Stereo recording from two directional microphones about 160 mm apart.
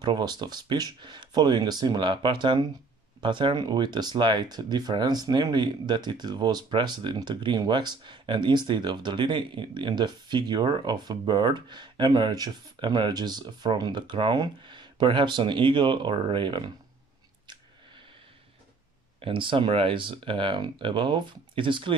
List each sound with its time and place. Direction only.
0.0 s speech: 25° right (ahead or behind)
19.1 s speech: 35° right (ahead or behind)